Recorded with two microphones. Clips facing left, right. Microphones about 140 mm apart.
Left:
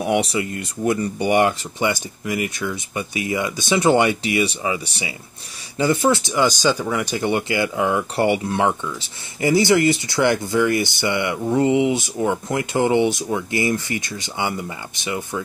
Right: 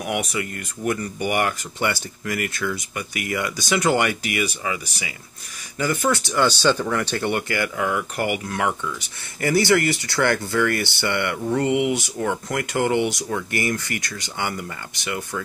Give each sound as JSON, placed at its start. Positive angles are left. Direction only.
{"t": 0.0, "sound": "speech", "side_deg": 30}